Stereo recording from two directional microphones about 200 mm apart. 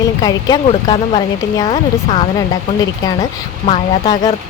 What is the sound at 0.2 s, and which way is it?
Speech, 20° left (ahead or behind).